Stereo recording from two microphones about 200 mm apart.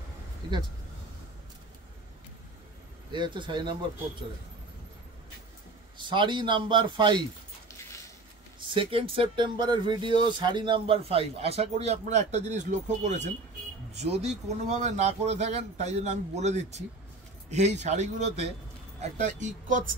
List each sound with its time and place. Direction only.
3.1 s speech: 25° right (ahead or behind)
5.9 s speech: 25° right (ahead or behind)
8.5 s speech: 25° right (ahead or behind)